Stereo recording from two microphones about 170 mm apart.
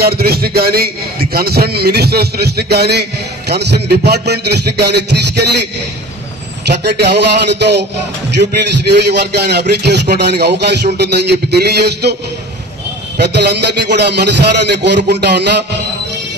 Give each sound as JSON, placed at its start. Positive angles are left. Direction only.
{"t": 0.0, "sound": "a man's voice", "side_deg": -65}
{"t": 6.7, "sound": "a man's voice", "side_deg": -85}
{"t": 13.2, "sound": "a man's voice", "side_deg": -80}